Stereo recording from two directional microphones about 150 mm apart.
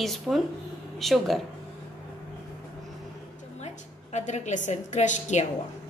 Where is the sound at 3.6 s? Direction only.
50° left (ahead or behind).